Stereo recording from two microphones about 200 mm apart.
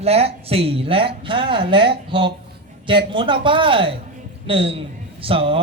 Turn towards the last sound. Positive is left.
turn(degrees=-25)  # may be behind; listen again after turning